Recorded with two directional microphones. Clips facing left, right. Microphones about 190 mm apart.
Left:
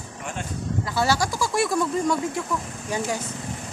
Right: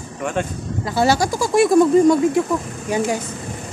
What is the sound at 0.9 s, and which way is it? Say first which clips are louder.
Speech: right 6 dB; 20° right (ahead or behind).